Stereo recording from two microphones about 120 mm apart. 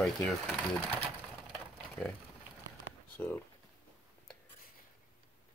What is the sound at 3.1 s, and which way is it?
Speech, 15° left (ahead or behind).